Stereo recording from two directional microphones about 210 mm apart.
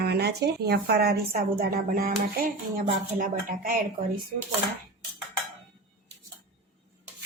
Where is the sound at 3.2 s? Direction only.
40° right (ahead or behind).